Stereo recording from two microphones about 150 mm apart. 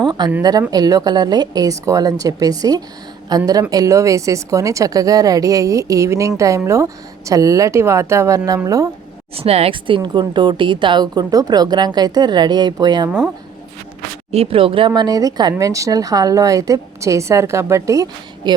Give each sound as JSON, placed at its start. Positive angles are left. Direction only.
{"t": 0.0, "sound": "a sound", "side_deg": -30}
{"t": 0.7, "sound": "speech", "side_deg": -25}
{"t": 9.3, "sound": "speech", "side_deg": -40}
{"t": 13.1, "sound": "speech", "side_deg": -5}
{"t": 14.3, "sound": "speech", "side_deg": -40}